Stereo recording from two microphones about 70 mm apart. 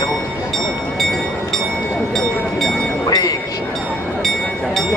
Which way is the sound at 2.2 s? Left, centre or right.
Centre.